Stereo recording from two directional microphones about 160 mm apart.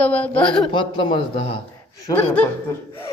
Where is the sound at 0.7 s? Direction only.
30° left (ahead or behind).